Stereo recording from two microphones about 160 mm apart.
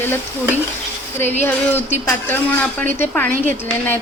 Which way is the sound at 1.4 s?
10° left (ahead or behind).